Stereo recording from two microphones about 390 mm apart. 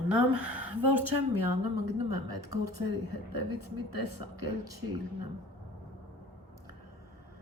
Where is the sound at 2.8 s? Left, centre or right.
Right.